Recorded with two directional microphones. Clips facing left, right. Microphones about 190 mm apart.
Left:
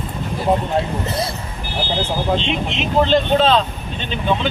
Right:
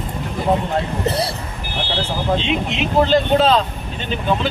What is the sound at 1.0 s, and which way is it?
Speech, 35° right (ahead or behind).